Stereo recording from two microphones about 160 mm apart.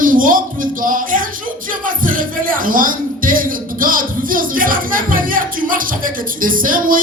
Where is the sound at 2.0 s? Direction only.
60° right (ahead or behind).